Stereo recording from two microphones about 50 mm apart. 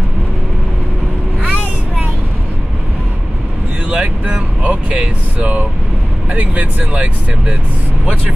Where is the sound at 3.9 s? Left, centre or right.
Right.